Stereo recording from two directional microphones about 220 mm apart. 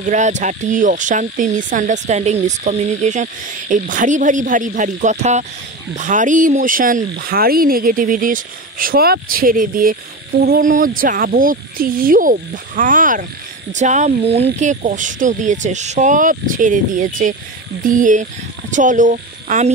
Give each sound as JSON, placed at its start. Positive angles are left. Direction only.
{"t": 0.0, "sound": "speech", "side_deg": -35}